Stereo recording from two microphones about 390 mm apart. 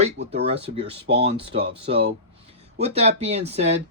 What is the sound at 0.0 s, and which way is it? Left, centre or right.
Speech, right.